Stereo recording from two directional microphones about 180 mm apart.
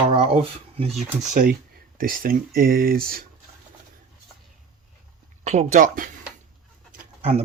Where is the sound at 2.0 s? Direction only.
55° right (ahead or behind).